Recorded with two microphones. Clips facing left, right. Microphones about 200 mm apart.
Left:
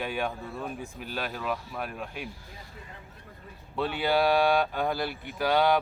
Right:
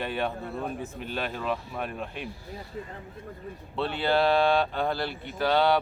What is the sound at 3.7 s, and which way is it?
Speech, 10° left (ahead or behind).